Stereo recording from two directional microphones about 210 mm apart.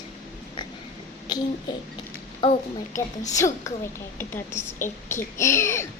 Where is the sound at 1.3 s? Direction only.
20° left (ahead or behind).